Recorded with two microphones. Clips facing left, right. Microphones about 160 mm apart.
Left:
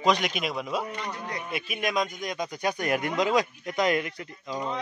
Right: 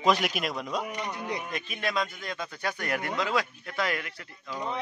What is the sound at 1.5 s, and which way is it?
A man's voice, 15° left (ahead or behind).